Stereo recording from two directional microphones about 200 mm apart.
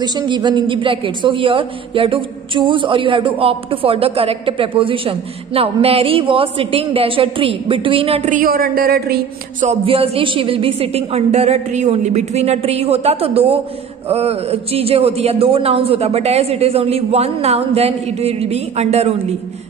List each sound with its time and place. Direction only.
0.0 s a man's voice: 20° right (ahead or behind); by 9.7 s 50° right (ahead or behind)
9.7 s speech: 30° right (ahead or behind)